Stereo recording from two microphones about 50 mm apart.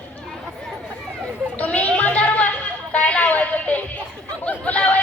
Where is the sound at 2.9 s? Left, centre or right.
Left.